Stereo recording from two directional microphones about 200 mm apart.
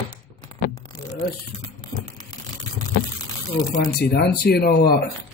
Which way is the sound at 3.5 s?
60° left (ahead or behind).